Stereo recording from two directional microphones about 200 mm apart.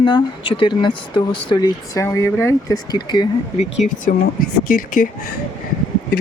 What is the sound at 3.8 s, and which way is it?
Speech, 40° left (ahead or behind).